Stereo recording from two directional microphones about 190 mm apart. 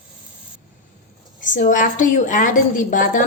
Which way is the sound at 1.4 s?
45° left (ahead or behind).